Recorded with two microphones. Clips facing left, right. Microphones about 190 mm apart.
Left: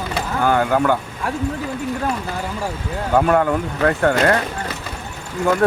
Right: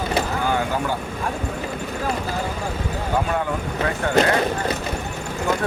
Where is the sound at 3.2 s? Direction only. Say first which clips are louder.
Left 9 dB; 60° left (ahead or behind).